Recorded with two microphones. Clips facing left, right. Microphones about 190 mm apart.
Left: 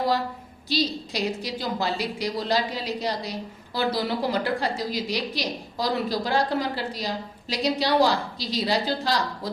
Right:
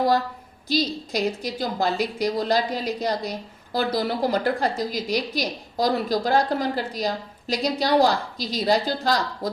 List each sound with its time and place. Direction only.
0.7 s a woman's voice: 45° right (ahead or behind)